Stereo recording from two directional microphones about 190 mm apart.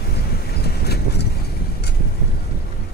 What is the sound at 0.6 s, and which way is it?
Vehicle, 55° left (ahead or behind).